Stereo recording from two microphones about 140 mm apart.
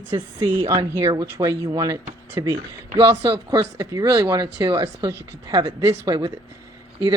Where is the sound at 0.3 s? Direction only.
25° right (ahead or behind).